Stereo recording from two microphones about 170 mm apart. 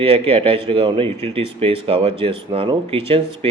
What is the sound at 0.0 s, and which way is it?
A man's voice, 35° right (ahead or behind).